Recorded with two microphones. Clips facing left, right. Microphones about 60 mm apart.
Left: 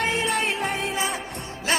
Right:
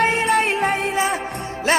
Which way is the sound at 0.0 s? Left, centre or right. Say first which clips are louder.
Right 6 dB; right.